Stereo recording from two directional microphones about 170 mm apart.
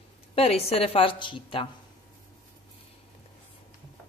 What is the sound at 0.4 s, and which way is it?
Speech, 35° left (ahead or behind).